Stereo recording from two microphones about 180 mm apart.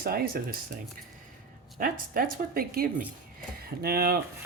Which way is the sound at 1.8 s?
50° right (ahead or behind).